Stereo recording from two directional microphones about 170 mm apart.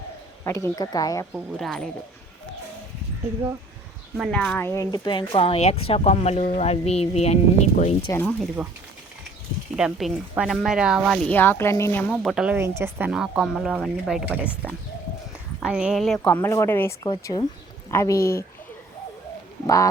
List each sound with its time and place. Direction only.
0.4 s speech: 15° left (ahead or behind)
1.3 s speech: centre (ahead or behind)
4.2 s a woman's voice: 5° left (ahead or behind); by 7.9 s 40° left (ahead or behind)
8.1 s speech: 10° left (ahead or behind)
8.6 s speech: 10° right (ahead or behind)
9.7 s speech: 5° right (ahead or behind); by 12.1 s 10° left (ahead or behind)
12.1 s speech: 5° right (ahead or behind)
15.6 s speech: 5° right (ahead or behind)
16.2 s speech: 10° left (ahead or behind)
19.6 s speech: 20° left (ahead or behind)